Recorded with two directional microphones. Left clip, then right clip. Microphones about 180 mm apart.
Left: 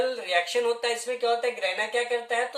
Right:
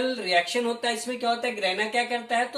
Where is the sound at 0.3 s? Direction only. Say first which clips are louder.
Right 2 dB; 50° left (ahead or behind).